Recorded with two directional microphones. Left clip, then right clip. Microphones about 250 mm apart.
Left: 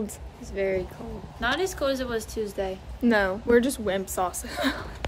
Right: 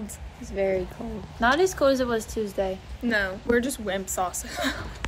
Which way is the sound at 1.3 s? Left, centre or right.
Centre.